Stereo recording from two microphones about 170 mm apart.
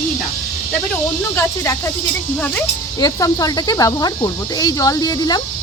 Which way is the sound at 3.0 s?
20° left (ahead or behind).